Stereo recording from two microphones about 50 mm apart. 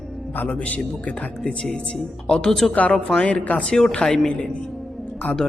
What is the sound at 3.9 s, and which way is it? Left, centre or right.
Speech, centre.